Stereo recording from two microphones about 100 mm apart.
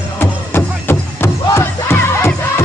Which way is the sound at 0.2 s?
20° left (ahead or behind).